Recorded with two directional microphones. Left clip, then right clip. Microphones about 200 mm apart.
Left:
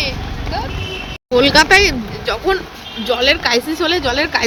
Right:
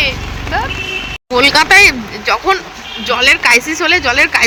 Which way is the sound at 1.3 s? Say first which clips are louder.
Right 2 dB; 20° left (ahead or behind).